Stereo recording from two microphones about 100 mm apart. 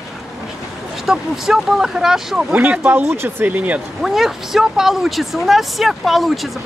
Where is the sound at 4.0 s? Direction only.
Centre (ahead or behind).